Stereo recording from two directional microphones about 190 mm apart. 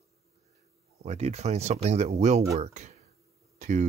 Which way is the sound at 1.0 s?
35° right (ahead or behind).